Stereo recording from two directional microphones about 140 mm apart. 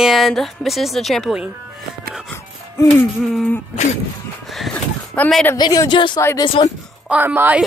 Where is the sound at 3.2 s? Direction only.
Centre (ahead or behind).